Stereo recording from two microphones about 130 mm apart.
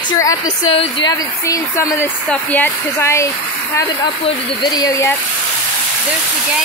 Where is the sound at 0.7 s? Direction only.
45° left (ahead or behind).